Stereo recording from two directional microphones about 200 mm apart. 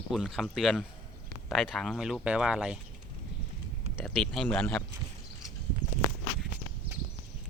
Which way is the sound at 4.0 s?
Centre (ahead or behind).